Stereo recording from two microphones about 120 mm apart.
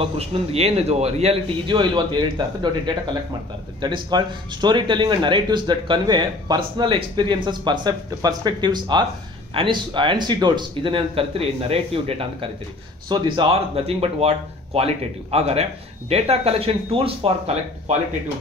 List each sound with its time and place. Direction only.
0.0 s speech: 55° right (ahead or behind)
13.1 s speech: 40° right (ahead or behind)
13.5 s speech: 55° right (ahead or behind)